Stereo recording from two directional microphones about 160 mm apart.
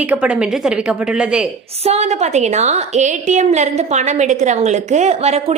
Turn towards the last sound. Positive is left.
turn(degrees=-40)  # may be behind; listen again after turning